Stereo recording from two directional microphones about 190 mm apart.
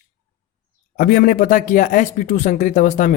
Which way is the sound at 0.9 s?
50° left (ahead or behind).